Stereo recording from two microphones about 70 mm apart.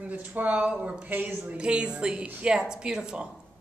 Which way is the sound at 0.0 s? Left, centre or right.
Right.